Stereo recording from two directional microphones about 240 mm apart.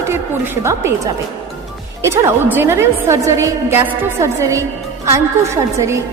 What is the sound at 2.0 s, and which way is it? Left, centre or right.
A woman's voice, centre.